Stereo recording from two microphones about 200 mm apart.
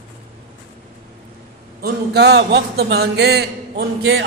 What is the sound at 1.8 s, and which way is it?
A man's voice, 55° right (ahead or behind).